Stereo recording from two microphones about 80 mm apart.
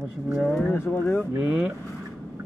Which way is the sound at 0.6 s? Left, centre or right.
Left.